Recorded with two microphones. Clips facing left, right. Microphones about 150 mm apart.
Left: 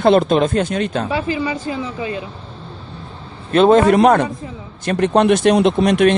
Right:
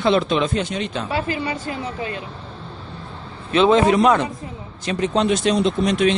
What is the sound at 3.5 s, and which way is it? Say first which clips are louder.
Speech: left 4 dB; 50° left (ahead or behind).